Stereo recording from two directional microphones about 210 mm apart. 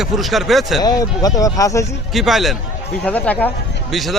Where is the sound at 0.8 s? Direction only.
20° left (ahead or behind).